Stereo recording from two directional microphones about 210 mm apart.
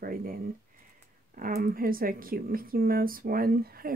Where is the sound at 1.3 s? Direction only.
45° right (ahead or behind).